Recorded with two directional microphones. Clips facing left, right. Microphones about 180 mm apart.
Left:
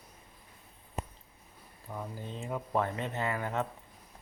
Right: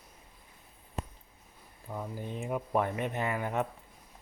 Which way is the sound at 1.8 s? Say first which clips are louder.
Right 2 dB; 10° right (ahead or behind).